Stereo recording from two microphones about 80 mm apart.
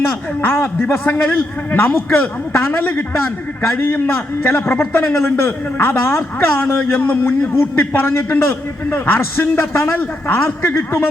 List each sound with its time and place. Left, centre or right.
0.4 s a man's voice: left